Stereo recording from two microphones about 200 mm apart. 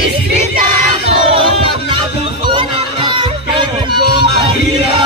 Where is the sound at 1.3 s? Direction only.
25° right (ahead or behind).